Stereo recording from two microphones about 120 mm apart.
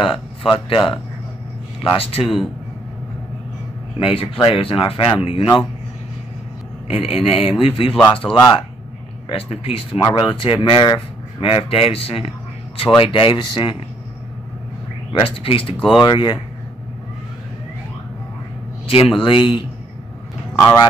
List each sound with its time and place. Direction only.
0.0 s speech: 45° left (ahead or behind)
4.0 s speech: 50° left (ahead or behind)
6.9 s speech: 55° left (ahead or behind)
8.2 s speech: 5° left (ahead or behind)
9.3 s speech: 50° left (ahead or behind)
9.9 s speech: 40° left (ahead or behind)
15.1 s speech: 50° left (ahead or behind)
16.0 s speech: 35° left (ahead or behind)
18.9 s speech: 50° left (ahead or behind)